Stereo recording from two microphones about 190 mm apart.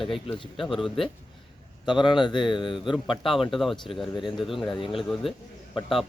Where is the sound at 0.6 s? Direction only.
Centre (ahead or behind).